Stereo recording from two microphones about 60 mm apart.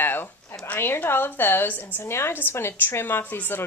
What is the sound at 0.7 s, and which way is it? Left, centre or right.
A woman's voice, left.